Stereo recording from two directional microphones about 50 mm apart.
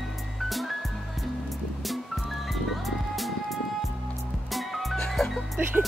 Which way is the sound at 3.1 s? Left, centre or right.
Centre.